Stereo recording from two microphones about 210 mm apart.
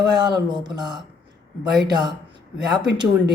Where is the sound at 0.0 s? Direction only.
20° right (ahead or behind).